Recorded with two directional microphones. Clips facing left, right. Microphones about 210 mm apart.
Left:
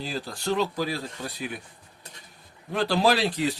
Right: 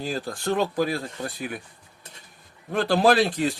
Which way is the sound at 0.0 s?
50° right (ahead or behind).